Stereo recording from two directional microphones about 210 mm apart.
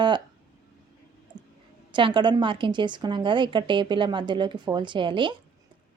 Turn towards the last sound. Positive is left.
turn(degrees=-20)  # may be behind; listen again after turning